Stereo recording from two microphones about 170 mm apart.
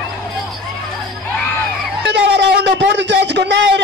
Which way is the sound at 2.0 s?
90° right.